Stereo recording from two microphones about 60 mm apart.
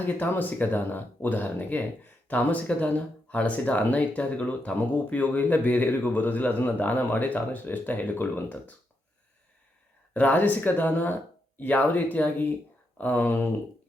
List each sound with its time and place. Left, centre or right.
0.0 s speech: left
10.2 s speech: left